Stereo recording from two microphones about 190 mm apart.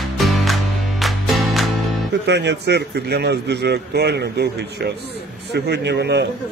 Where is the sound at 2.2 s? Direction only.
65° right (ahead or behind).